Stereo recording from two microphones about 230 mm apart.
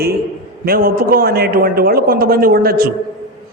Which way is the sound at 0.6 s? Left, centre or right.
Right.